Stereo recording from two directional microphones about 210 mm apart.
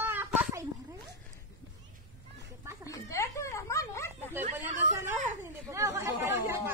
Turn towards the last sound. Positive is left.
turn(degrees=-10)  # may be behind; listen again after turning